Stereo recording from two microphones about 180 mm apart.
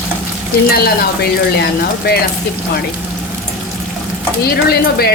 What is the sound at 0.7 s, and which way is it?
Speech, 60° left (ahead or behind).